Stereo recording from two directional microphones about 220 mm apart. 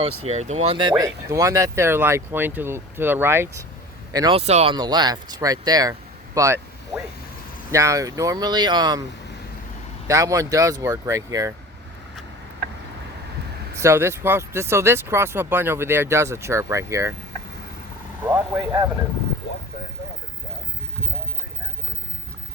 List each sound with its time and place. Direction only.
0.3 s speech: 30° right (ahead or behind); by 6.6 s 15° right (ahead or behind)
7.7 s speech: 15° right (ahead or behind)
10.1 s speech: 15° right (ahead or behind)
13.7 s speech: 10° right (ahead or behind)
18.3 s speech: 15° right (ahead or behind)